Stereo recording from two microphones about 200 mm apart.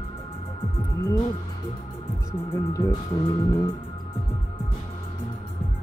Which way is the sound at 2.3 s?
20° left (ahead or behind).